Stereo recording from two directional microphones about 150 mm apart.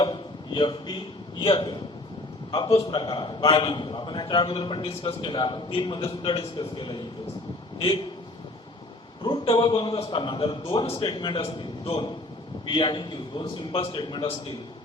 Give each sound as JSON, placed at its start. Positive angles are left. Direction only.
{"t": 0.0, "sound": "a man's voice", "side_deg": 30}
{"t": 9.2, "sound": "a man's voice", "side_deg": 35}